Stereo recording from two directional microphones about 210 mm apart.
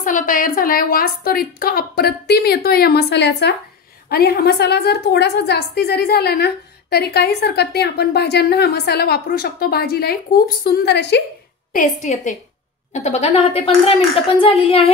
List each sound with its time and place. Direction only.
0.0 s a woman's voice: 40° left (ahead or behind)
11.7 s a woman's voice: 35° left (ahead or behind)